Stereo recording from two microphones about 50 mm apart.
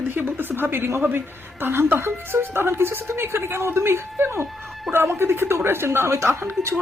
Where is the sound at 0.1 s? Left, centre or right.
Right.